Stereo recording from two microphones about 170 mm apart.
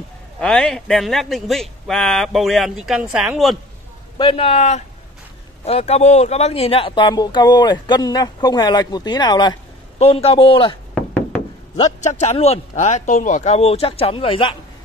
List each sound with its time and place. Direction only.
0.4 s speech: 5° left (ahead or behind)
4.2 s speech: 35° left (ahead or behind)
9.9 s speech: 35° left (ahead or behind)
12.0 s speech: 40° left (ahead or behind)